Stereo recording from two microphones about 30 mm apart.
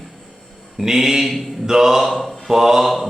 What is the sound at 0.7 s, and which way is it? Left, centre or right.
Mantra, centre.